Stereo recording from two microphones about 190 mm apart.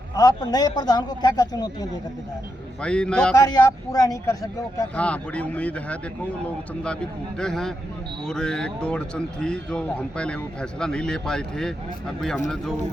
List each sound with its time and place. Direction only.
0.2 s speech: 20° left (ahead or behind)
2.8 s speech: 5° left (ahead or behind)
3.3 s speech: 20° left (ahead or behind)
4.8 s speech: 5° left (ahead or behind)
7.3 s speech: 5° left (ahead or behind)